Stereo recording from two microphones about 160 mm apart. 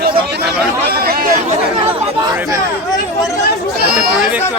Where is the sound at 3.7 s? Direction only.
75° right (ahead or behind).